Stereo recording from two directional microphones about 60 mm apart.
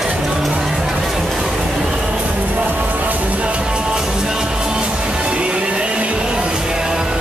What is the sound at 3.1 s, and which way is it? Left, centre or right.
Music, centre.